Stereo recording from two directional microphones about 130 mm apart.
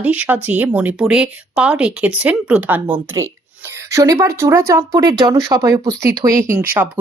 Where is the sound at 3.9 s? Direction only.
25° right (ahead or behind).